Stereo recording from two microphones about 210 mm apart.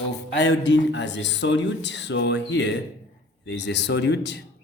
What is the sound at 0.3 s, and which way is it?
Speech, 55° left (ahead or behind).